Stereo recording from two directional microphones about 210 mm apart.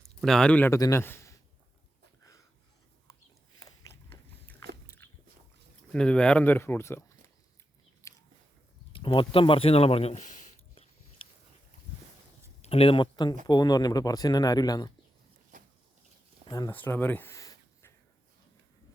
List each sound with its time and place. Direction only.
0.0 s a man's voice: centre (ahead or behind)
3.6 s biting: 15° left (ahead or behind)
5.0 s boat: 10° left (ahead or behind)
5.9 s speech: 5° left (ahead or behind)
8.0 s a sound: 15° left (ahead or behind)
8.9 s speech: 25° left (ahead or behind)
12.6 s speech: 25° left (ahead or behind)
16.5 s speech: 20° left (ahead or behind)
16.7 s a sound: 10° left (ahead or behind)